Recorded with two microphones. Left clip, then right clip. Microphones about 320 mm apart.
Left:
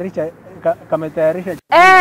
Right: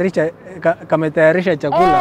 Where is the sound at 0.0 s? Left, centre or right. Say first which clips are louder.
Right 5 dB; right.